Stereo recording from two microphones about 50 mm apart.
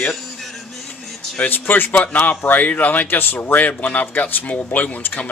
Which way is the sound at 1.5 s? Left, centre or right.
Left.